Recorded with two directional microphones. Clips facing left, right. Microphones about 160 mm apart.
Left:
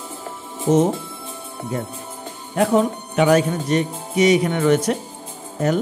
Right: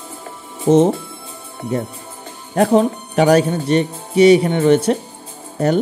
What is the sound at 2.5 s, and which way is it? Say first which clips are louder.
Speech: right 4 dB; 40° right (ahead or behind).